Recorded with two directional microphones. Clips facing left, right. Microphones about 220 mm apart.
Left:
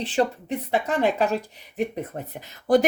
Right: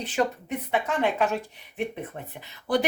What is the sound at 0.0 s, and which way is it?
Speech, 30° left (ahead or behind).